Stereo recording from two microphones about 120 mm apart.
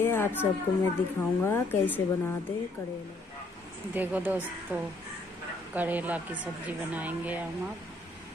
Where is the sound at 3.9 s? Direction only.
15° right (ahead or behind).